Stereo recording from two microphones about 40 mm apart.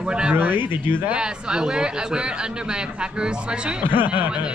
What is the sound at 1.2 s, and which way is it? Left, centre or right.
Speech, centre.